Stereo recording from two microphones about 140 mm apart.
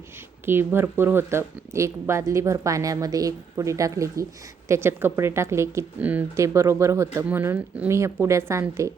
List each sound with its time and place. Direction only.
0.4 s speech: 15° right (ahead or behind)